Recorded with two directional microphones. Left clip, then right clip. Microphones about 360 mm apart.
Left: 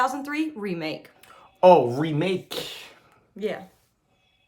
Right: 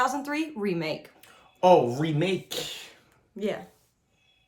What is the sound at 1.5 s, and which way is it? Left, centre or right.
Speech, centre.